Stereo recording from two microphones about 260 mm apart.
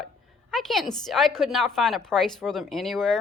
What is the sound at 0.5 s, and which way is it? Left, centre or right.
A woman's voice, centre.